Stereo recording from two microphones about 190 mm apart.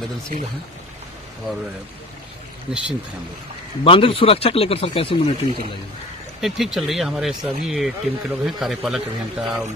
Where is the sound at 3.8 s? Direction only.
30° left (ahead or behind).